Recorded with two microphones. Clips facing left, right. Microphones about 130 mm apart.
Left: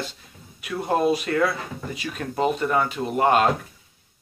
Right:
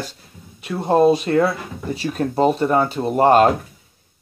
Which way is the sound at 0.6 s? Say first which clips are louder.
Right 7 dB; 30° right (ahead or behind).